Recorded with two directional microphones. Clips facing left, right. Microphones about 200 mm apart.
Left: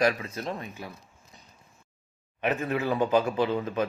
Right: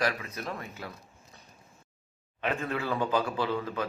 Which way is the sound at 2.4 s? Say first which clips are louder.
Left 4 dB; 15° left (ahead or behind).